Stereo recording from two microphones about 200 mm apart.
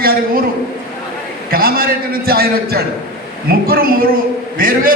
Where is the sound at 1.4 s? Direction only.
45° right (ahead or behind).